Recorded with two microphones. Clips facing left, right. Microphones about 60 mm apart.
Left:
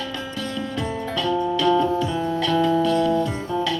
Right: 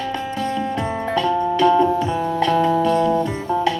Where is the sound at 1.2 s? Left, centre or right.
Right.